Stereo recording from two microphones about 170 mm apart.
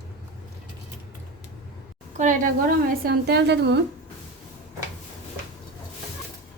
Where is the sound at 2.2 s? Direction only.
45° right (ahead or behind).